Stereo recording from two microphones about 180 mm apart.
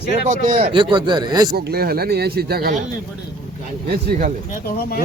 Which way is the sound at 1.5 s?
60° right (ahead or behind).